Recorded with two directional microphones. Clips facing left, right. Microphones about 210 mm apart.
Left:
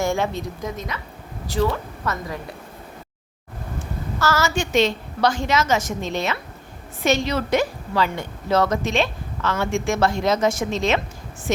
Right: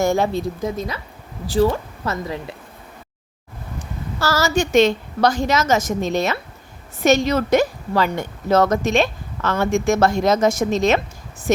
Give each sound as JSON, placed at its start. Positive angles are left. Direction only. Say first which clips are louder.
{"t": 0.0, "sound": "a woman's voice", "louder": "right 4 dB", "side_deg": -40}
{"t": 4.2, "sound": "a woman's voice", "louder": "right 3 dB", "side_deg": -35}